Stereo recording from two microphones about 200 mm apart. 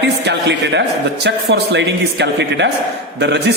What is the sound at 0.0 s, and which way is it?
A man's voice, 60° right (ahead or behind).